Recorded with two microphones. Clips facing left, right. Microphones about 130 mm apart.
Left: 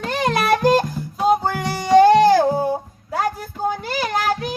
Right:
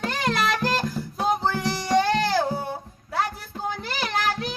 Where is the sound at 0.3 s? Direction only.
50° left (ahead or behind).